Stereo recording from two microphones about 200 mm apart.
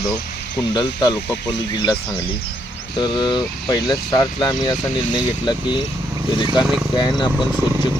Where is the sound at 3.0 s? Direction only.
20° left (ahead or behind).